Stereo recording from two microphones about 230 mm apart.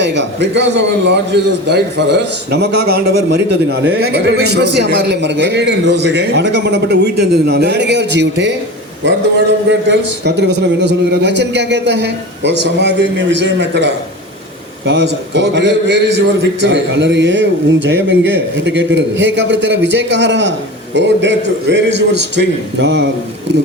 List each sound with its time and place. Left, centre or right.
0.0 s a man's voice: right
9.9 s a man's voice: right